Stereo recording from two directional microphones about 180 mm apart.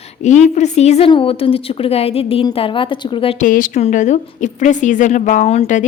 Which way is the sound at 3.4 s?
45° left (ahead or behind).